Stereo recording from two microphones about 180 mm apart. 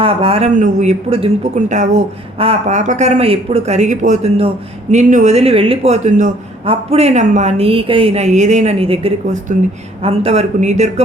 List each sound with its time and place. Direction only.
0.0 s speech: 30° right (ahead or behind)